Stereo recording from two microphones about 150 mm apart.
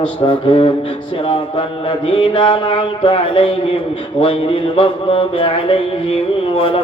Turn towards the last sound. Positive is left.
turn(degrees=35)  # may be behind; listen again after turning